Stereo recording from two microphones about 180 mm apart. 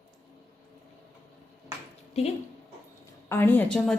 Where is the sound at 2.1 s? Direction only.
35° left (ahead or behind).